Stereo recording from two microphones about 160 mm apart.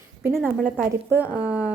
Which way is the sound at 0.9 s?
10° right (ahead or behind).